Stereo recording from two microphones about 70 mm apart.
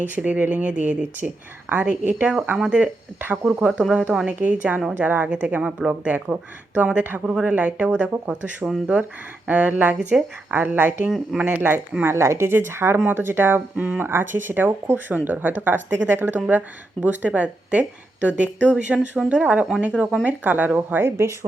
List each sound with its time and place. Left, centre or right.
0.1 s speech: right
12.0 s speech: right
13.7 s speech: centre
14.0 s speech: right